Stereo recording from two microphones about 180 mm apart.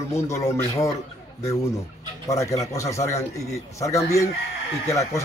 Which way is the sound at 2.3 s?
15° left (ahead or behind).